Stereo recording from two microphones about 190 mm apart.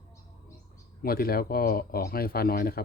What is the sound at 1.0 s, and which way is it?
Speech, 55° left (ahead or behind).